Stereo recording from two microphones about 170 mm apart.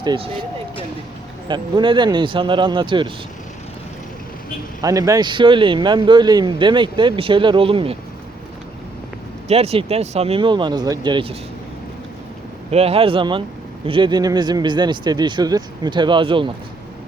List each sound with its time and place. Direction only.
0.0 s speech: 25° right (ahead or behind)
1.5 s speech: 25° right (ahead or behind)
4.8 s speech: 20° right (ahead or behind)
9.5 s speech: 35° right (ahead or behind)
12.7 s speech: 35° right (ahead or behind)